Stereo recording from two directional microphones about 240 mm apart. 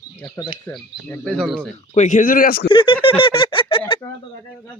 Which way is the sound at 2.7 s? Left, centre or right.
Centre.